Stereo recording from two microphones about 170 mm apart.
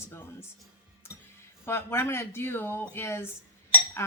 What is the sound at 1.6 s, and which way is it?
Speech, 15° left (ahead or behind).